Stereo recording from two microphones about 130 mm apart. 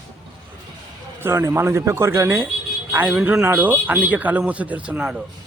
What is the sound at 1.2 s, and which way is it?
Speech, 20° right (ahead or behind).